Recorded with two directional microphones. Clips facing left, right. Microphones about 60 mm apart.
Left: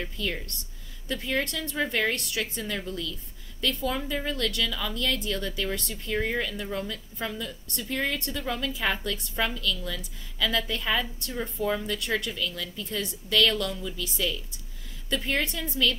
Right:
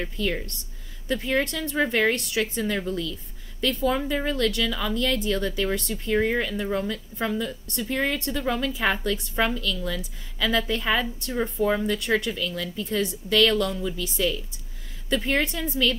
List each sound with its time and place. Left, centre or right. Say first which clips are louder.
0.2 s speech: right 6 dB; right